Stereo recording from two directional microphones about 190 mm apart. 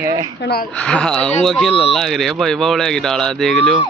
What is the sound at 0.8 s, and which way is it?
A man's voice, 5° left (ahead or behind).